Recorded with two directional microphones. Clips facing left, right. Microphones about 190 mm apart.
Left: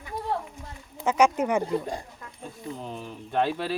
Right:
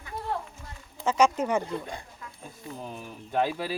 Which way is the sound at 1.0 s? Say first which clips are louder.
Left 1 dB; 15° left (ahead or behind).